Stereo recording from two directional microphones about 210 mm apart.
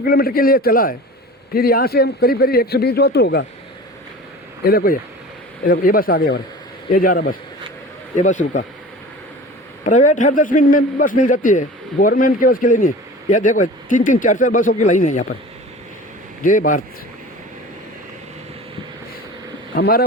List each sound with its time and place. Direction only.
0.0 s a man's voice: 45° left (ahead or behind)
4.6 s a man's voice: 45° left (ahead or behind)
9.8 s a man's voice: 35° left (ahead or behind)
16.4 s a man's voice: 40° left (ahead or behind)
19.7 s a man's voice: 45° left (ahead or behind)